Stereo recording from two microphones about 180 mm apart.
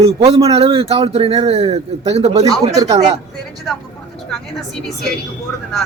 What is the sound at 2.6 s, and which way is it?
Speech, 20° right (ahead or behind).